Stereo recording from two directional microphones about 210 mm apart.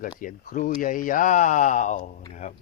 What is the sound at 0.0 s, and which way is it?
Speech, 40° left (ahead or behind).